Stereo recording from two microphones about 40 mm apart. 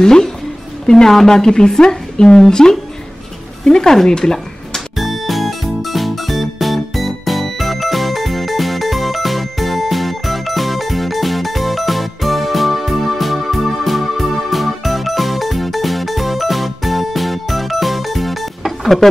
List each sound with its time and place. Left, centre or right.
0.0 s speech: centre
4.9 s music: centre